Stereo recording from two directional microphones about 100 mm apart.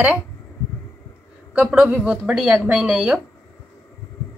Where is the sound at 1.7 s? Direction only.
10° right (ahead or behind).